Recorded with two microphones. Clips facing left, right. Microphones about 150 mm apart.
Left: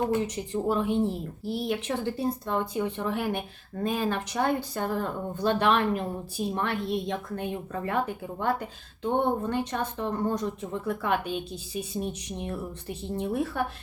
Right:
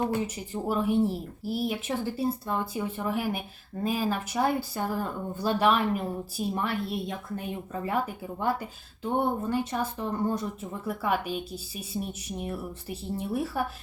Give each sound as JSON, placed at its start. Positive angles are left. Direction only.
{"t": 0.5, "sound": "speech", "side_deg": -5}
{"t": 0.9, "sound": "speech", "side_deg": 25}
{"t": 1.5, "sound": "speech", "side_deg": -5}